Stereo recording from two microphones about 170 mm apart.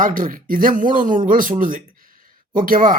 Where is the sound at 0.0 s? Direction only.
55° right (ahead or behind).